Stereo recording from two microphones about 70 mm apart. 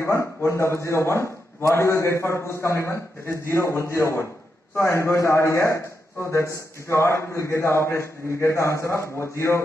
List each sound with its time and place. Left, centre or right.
0.0 s a man's voice: left